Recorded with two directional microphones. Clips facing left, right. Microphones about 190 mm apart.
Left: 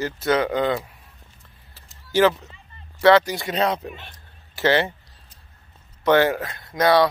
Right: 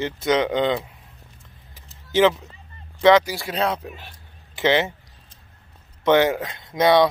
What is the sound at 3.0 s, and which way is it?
Speech, 15° right (ahead or behind).